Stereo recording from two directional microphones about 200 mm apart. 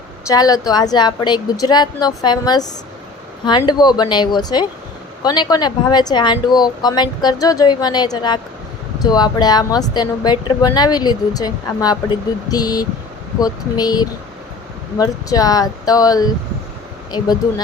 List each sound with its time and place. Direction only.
0.3 s speech: 20° left (ahead or behind)